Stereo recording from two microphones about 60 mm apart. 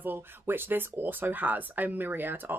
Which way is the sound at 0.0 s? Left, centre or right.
Right.